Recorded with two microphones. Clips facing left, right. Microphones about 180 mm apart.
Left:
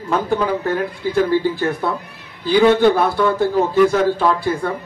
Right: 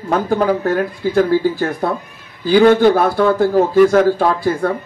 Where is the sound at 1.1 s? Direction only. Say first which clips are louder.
Right 3 dB; 55° right (ahead or behind).